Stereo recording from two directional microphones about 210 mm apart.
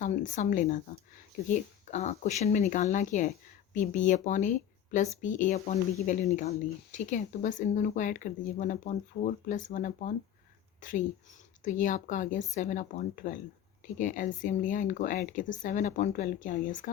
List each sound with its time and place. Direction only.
0.0 s a woman's voice: 35° left (ahead or behind)